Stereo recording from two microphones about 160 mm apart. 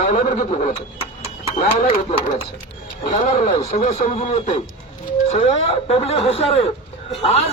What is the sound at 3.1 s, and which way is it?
A man's voice, 50° left (ahead or behind).